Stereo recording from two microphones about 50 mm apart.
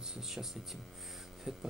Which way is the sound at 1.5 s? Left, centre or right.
Centre.